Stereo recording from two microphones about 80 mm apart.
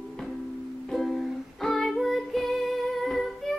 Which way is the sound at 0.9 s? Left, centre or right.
Centre.